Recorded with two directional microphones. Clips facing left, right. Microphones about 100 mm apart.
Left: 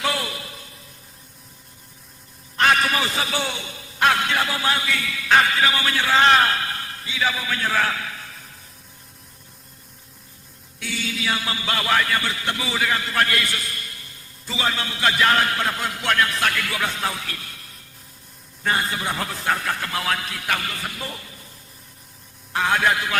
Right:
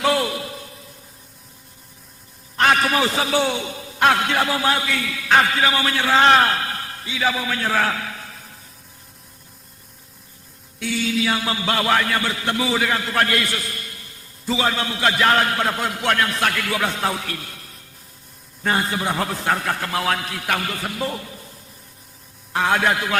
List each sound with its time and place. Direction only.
0.0 s a sound: 35° right (ahead or behind)
2.6 s a man's voice: 35° right (ahead or behind)
11.2 s a man's voice: 40° right (ahead or behind)
18.6 s a man's voice: 40° right (ahead or behind)
22.5 s a man's voice: 45° right (ahead or behind)